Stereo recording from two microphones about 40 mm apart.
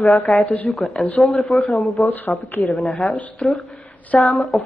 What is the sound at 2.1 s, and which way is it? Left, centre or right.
Speech, left.